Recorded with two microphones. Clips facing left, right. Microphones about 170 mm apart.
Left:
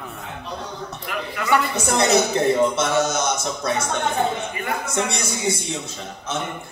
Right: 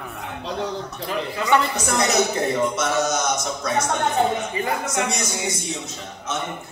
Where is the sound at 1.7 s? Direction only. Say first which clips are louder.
Left 2 dB; 30° left (ahead or behind).